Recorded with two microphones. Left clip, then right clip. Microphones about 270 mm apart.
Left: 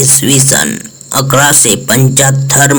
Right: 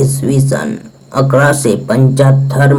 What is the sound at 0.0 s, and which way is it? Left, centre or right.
Speech, left.